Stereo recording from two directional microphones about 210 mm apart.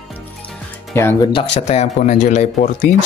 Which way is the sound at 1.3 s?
30° left (ahead or behind).